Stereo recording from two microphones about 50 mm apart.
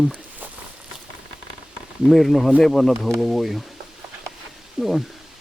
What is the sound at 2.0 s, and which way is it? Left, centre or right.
Speech, centre.